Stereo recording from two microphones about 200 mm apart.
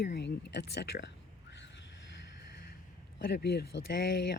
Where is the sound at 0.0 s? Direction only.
55° left (ahead or behind).